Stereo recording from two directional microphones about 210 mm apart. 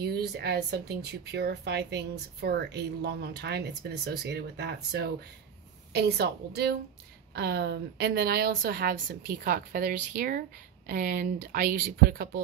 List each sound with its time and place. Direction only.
0.0 s speech: 50° right (ahead or behind)